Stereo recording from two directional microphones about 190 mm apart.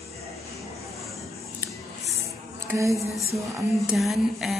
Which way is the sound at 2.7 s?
15° right (ahead or behind).